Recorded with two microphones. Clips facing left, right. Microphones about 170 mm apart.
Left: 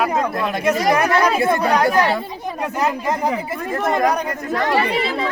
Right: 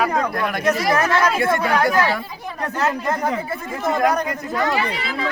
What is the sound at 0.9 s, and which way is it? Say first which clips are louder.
Speech: left 3 dB; 15° left (ahead or behind).